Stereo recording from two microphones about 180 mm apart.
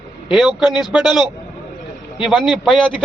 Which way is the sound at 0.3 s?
Centre (ahead or behind).